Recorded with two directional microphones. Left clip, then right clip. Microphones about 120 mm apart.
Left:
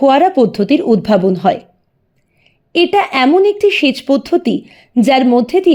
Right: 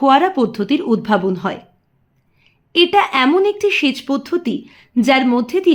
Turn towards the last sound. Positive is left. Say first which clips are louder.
# left 4 dB
turn(degrees=45)  # may be behind; listen again after turning